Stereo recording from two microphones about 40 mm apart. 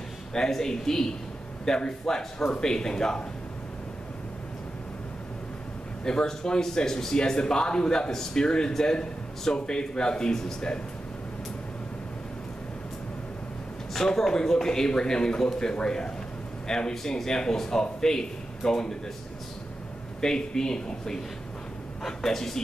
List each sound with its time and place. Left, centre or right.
0.3 s a man's voice: centre
6.0 s speech: centre
13.9 s a man's voice: centre
20.2 s a man's voice: centre